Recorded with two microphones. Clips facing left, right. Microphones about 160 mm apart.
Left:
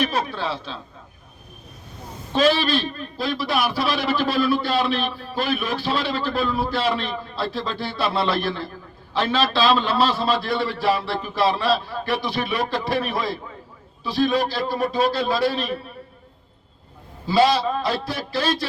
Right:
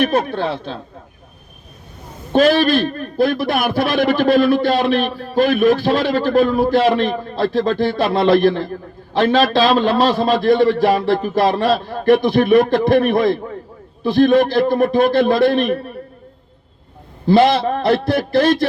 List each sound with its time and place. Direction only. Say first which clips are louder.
0.0 s a man's voice: right 7 dB; 55° right (ahead or behind)
2.3 s a man's voice: right 6 dB; 55° right (ahead or behind)
17.2 s a man's voice: right 5 dB; 55° right (ahead or behind)